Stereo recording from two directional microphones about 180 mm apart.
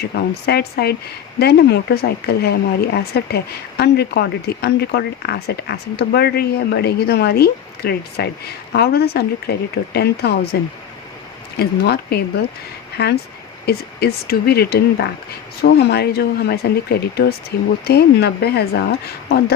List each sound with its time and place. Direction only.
0.4 s speech: 60° left (ahead or behind)